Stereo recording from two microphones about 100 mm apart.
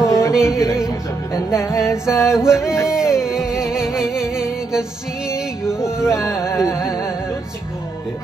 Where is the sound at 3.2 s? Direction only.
5° right (ahead or behind).